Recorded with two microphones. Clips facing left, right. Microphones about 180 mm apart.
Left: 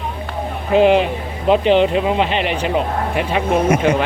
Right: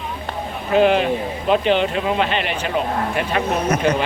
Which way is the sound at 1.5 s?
30° left (ahead or behind).